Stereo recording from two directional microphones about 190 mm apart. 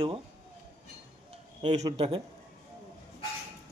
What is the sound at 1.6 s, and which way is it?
Speech, 35° right (ahead or behind).